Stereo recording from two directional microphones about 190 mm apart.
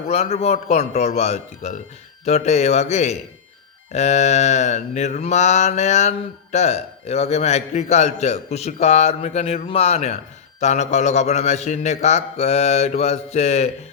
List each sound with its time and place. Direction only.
0.1 s mantra: 35° left (ahead or behind)